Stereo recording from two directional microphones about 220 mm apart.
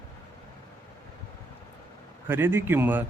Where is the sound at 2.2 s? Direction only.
10° right (ahead or behind).